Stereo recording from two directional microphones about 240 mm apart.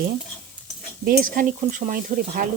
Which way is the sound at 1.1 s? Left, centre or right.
Right.